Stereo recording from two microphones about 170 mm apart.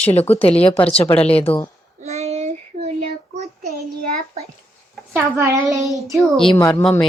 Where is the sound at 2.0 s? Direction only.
40° right (ahead or behind).